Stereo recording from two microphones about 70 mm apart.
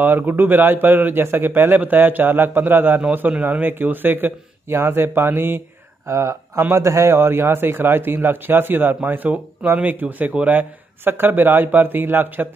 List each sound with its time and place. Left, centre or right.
0.0 s a man's voice: right